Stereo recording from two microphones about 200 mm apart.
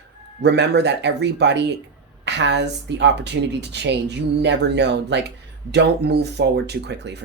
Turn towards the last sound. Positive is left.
turn(degrees=-60)  # may be behind; listen again after turning